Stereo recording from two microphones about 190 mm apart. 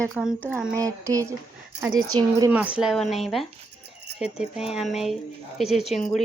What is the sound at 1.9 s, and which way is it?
Speech, 90° right.